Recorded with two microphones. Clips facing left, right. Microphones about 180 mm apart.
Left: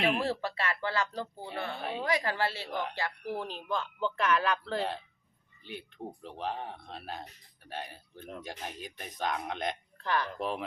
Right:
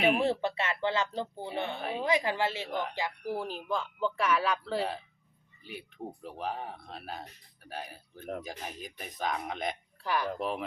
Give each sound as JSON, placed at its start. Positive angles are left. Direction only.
{"t": 0.0, "sound": "speech", "side_deg": 0}
{"t": 0.3, "sound": "speech", "side_deg": -20}
{"t": 1.7, "sound": "speech", "side_deg": 0}
{"t": 2.0, "sound": "speech", "side_deg": -20}